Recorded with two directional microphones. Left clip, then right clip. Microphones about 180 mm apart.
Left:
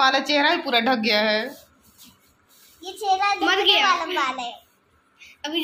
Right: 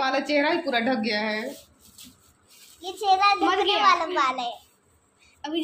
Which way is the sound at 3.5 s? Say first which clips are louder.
Left 4 dB; 25° right (ahead or behind).